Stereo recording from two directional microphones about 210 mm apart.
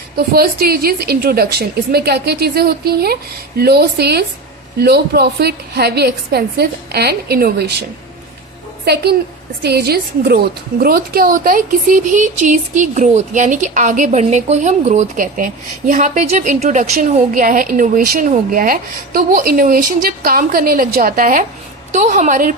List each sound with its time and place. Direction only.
0.2 s a woman's voice: 45° right (ahead or behind)